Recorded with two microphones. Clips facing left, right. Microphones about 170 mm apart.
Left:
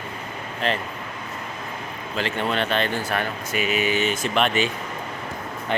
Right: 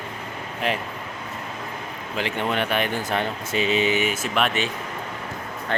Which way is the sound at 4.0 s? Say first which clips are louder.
Left 1 dB; 5° right (ahead or behind).